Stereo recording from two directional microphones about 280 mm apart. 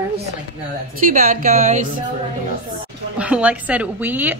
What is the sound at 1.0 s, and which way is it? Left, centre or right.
Speech, right.